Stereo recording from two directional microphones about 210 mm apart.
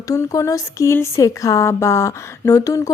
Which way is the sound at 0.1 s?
15° left (ahead or behind).